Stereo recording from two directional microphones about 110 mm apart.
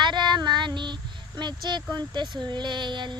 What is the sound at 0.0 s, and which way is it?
Child singing, 45° right (ahead or behind).